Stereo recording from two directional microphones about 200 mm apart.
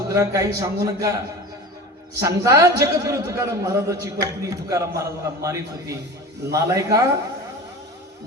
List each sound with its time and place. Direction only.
0.1 s a man's voice: 15° right (ahead or behind)
2.2 s a man's voice: 15° right (ahead or behind)